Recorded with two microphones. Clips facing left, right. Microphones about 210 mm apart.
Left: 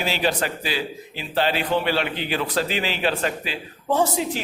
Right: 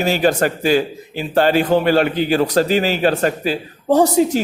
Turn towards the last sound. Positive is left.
turn(degrees=-40)  # may be behind; listen again after turning